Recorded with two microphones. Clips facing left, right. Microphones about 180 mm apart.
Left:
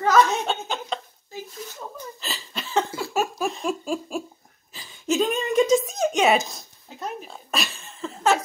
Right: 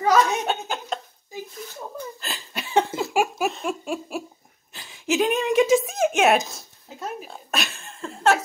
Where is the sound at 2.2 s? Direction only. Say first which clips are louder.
Even; centre (ahead or behind).